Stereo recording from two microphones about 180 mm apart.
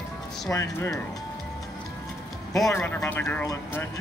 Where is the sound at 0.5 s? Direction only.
20° left (ahead or behind).